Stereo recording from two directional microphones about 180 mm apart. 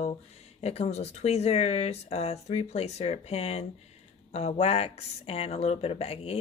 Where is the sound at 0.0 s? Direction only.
35° left (ahead or behind).